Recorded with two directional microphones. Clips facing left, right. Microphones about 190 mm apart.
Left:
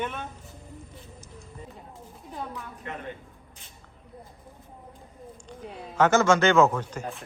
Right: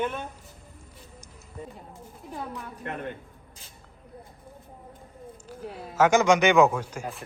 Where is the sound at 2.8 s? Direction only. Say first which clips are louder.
Right 3 dB; 55° right (ahead or behind).